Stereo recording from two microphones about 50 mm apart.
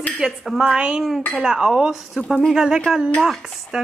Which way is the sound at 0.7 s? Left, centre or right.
Centre.